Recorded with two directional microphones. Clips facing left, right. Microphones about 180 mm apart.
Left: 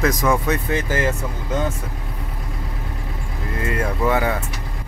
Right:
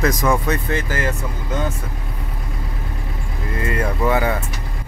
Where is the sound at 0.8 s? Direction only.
20° left (ahead or behind).